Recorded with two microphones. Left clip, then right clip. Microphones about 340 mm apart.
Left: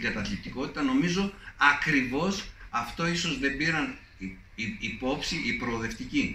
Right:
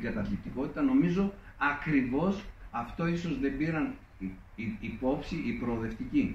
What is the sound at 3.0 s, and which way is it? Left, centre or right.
A man's voice, left.